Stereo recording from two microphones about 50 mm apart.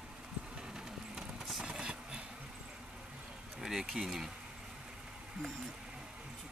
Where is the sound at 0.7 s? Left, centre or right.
Centre.